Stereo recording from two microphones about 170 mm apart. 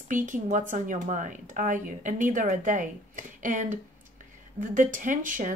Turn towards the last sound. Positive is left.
turn(degrees=-50)  # may be behind; listen again after turning